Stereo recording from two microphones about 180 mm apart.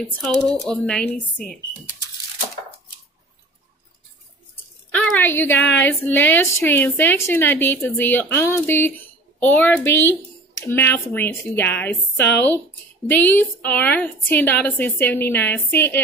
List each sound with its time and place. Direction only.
0.7 s speech: 5° left (ahead or behind)
4.9 s a sound: 10° left (ahead or behind)
5.8 s a woman's voice: 10° left (ahead or behind)
12.2 s speech: 70° left (ahead or behind)
13.1 s a woman's voice: 10° left (ahead or behind)